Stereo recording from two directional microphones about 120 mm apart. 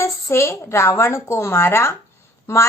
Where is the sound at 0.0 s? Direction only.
25° left (ahead or behind).